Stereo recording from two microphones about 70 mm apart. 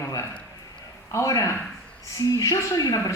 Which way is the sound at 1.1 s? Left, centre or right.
Left.